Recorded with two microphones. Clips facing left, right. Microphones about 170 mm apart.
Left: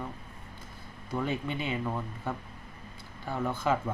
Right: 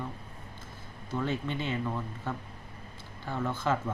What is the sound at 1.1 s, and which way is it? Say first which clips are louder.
Speech: even; 10° left (ahead or behind).